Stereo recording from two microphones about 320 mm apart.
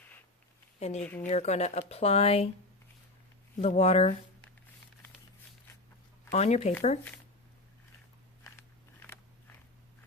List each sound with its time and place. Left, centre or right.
0.8 s speech: left
1.0 s speech: centre
1.3 s speech: left
3.6 s speech: centre
6.3 s speech: centre
8.4 s biting: centre